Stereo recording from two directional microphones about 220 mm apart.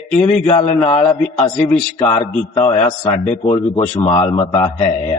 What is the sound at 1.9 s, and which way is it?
Speech, 15° left (ahead or behind).